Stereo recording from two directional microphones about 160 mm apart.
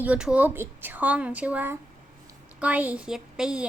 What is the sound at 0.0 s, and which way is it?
A woman's voice, 10° right (ahead or behind).